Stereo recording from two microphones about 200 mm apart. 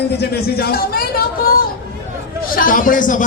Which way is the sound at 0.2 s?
50° left (ahead or behind).